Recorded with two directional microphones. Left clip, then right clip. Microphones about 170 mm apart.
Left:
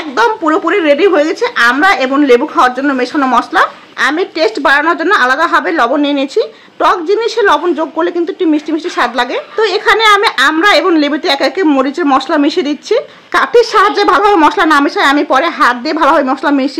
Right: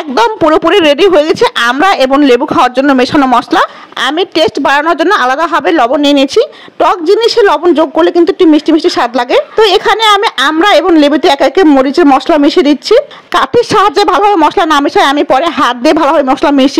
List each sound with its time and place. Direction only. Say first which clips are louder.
0.2 s a woman's voice: right 3 dB; 55° right (ahead or behind)